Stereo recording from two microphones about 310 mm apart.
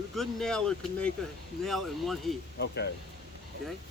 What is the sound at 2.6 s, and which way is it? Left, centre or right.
Speech, left.